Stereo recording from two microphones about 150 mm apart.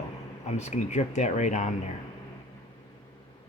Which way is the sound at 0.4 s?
50° left (ahead or behind).